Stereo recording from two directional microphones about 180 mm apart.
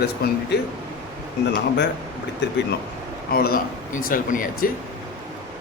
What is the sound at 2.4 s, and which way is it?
Speech, 80° left.